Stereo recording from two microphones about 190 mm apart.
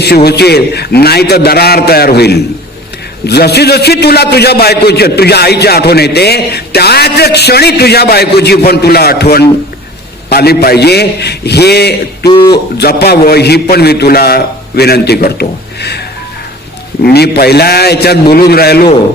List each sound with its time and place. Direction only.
0.3 s a man's voice: 60° left (ahead or behind)
17.0 s a man's voice: 55° left (ahead or behind)